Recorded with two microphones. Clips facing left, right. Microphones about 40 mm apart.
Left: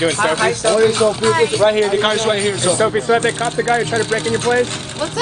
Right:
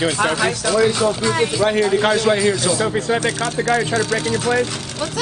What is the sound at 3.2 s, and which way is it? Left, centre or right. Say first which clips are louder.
A man's voice: left 3 dB; left.